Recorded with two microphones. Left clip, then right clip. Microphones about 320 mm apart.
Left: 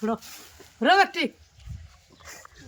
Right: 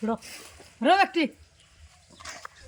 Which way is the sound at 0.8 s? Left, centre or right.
Centre.